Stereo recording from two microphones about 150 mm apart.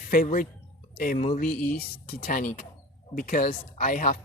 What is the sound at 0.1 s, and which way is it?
Speech, 65° left (ahead or behind).